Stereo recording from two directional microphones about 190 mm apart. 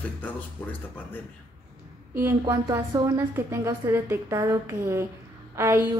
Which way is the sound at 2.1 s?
15° right (ahead or behind).